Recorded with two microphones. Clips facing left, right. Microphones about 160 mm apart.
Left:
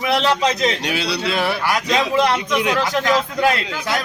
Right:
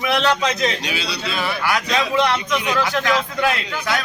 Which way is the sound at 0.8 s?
60° left (ahead or behind).